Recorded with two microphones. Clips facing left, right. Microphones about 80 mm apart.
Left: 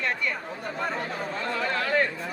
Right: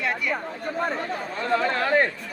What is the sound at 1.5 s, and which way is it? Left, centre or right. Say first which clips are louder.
Speech: right 6 dB; right.